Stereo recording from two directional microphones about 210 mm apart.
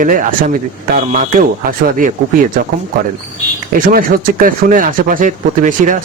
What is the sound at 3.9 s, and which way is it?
Speech, 40° right (ahead or behind).